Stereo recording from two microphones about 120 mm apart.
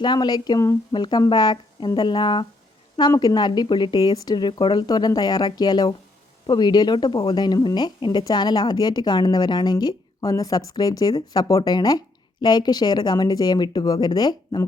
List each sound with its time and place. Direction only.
0.0 s a woman's voice: 35° left (ahead or behind)